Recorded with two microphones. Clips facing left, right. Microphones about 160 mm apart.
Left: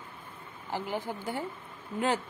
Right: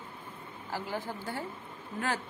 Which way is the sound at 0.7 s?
20° left (ahead or behind).